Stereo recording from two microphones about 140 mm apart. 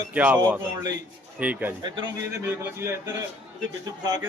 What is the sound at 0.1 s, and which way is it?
Speech, 10° right (ahead or behind).